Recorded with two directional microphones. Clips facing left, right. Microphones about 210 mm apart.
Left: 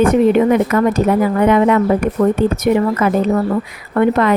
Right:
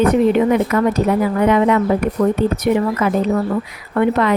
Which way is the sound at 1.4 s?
50° left (ahead or behind).